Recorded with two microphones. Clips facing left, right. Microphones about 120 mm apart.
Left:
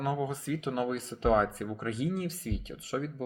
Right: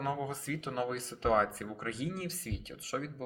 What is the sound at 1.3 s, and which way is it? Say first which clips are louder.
Speech: left 3 dB; 40° left (ahead or behind).